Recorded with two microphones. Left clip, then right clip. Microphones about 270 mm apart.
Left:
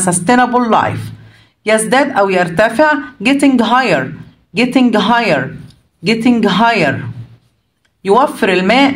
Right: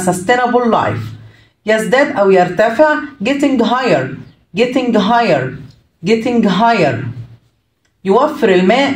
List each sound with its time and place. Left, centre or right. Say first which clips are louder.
0.0 s speech: left 1 dB; left
8.2 s speech: right 2 dB; left